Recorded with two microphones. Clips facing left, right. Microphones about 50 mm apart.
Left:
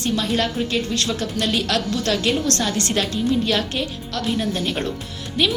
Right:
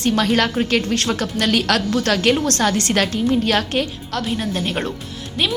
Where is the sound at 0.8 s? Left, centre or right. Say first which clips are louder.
Right 3 dB; right.